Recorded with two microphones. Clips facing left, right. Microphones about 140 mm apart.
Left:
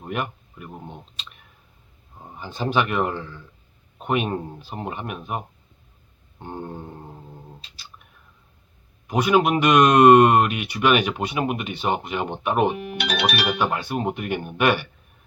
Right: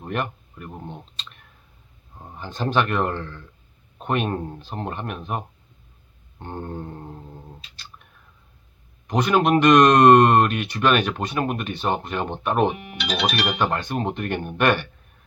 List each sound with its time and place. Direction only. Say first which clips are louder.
0.0 s speech: right 1 dB; 5° left (ahead or behind)
6.4 s speech: right 1 dB; 10° left (ahead or behind)
9.0 s speech: even; 10° left (ahead or behind)
13.0 s speech: even; 60° left (ahead or behind)
13.6 s speech: even; 10° left (ahead or behind)